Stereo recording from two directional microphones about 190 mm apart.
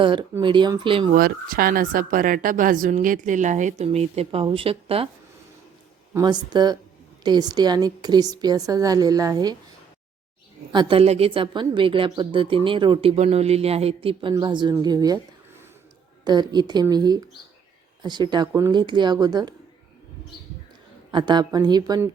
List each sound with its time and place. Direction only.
0.0 s a woman's voice: 25° right (ahead or behind)
1.1 s speech: 50° right (ahead or behind); by 5.0 s 30° right (ahead or behind)
6.1 s a woman's voice: 20° right (ahead or behind)
10.7 s a woman's voice: 25° right (ahead or behind)
16.2 s a woman's voice: 20° right (ahead or behind)
21.1 s a woman's voice: 25° right (ahead or behind)